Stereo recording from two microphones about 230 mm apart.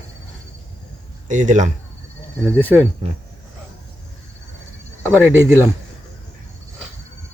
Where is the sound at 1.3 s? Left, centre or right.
Right.